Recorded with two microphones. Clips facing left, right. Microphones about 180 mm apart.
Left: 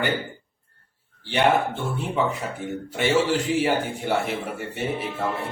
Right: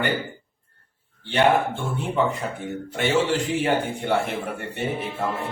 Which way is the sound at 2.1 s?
5° left (ahead or behind).